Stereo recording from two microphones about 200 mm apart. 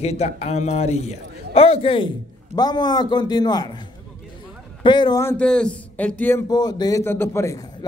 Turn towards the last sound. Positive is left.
turn(degrees=15)  # may be behind; listen again after turning